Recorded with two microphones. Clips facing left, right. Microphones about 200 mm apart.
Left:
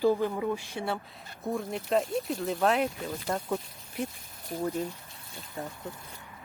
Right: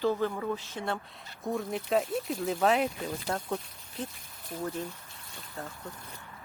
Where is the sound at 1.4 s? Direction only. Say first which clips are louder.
Even; centre (ahead or behind).